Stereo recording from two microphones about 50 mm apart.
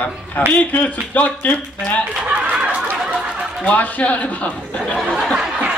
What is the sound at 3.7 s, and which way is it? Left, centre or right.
A man's voice, left.